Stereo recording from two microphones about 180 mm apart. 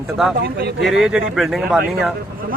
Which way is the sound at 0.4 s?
60° right (ahead or behind).